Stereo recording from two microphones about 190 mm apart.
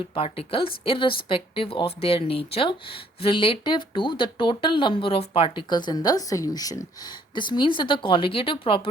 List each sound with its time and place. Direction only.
0.1 s speech: 30° left (ahead or behind)